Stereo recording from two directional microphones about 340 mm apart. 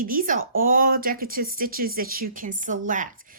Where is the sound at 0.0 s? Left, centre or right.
Right.